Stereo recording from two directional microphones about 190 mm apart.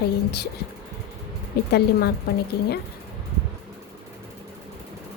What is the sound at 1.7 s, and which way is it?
Speech, 55° left (ahead or behind).